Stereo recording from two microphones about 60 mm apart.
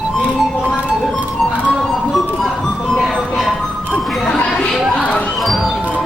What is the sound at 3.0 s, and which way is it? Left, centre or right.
Music, centre.